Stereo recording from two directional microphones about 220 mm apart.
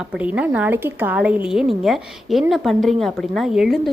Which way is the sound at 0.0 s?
5° right (ahead or behind).